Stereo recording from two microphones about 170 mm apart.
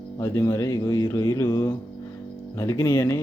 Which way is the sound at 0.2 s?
20° left (ahead or behind).